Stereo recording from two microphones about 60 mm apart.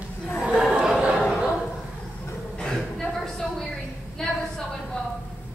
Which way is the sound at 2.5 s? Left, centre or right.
Centre.